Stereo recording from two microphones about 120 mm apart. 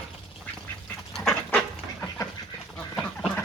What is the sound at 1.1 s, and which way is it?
Duck, 5° left (ahead or behind).